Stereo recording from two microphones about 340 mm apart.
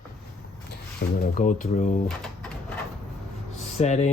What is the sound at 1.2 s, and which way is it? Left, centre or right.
Speech, left.